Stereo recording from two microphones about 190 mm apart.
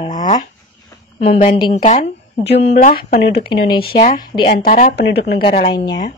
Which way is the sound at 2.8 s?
45° left (ahead or behind).